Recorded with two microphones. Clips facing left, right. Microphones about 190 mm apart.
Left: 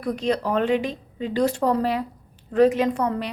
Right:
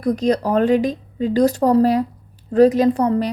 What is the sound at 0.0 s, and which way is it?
A woman's voice, 40° right (ahead or behind).